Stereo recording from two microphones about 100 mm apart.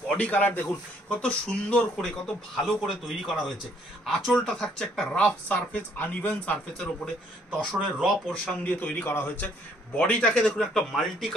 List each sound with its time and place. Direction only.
0.1 s speech: 15° left (ahead or behind)
8.0 s speech: centre (ahead or behind)
8.6 s speech: 15° left (ahead or behind)